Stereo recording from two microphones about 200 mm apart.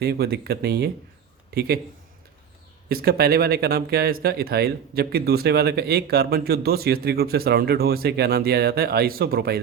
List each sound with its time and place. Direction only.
0.0 s speech: 55° right (ahead or behind)
2.9 s speech: 50° right (ahead or behind)